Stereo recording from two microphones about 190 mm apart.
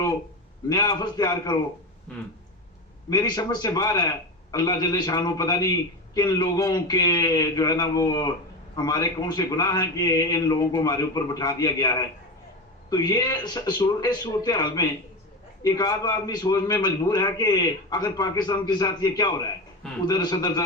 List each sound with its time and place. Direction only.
0.7 s a man's voice: 20° left (ahead or behind)
3.1 s a man's voice: 20° left (ahead or behind)